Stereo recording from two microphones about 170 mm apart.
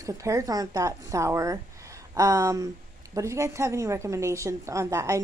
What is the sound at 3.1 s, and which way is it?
A woman's voice, 15° right (ahead or behind).